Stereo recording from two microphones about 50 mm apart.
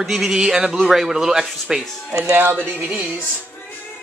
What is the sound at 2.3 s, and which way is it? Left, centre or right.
Speech, right.